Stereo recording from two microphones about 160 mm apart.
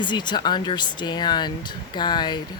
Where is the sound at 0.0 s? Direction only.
30° left (ahead or behind).